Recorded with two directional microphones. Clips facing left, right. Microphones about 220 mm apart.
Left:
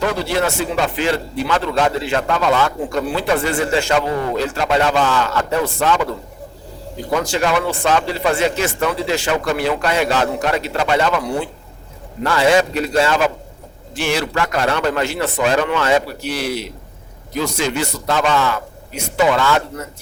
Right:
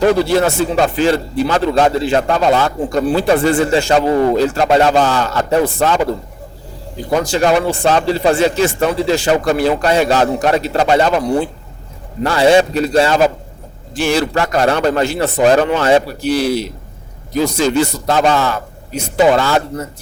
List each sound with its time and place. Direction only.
0.3 s a man's voice: 35° right (ahead or behind)
7.1 s a man's voice: 35° right (ahead or behind)